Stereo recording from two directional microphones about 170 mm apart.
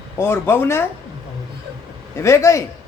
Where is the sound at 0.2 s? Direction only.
15° left (ahead or behind).